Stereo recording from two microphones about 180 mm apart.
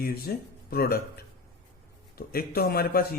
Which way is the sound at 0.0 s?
55° left (ahead or behind).